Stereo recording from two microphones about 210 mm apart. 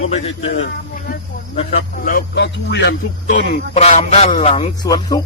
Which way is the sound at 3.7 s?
30° left (ahead or behind).